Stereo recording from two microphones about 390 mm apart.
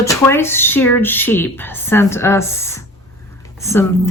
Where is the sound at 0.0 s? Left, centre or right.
Centre.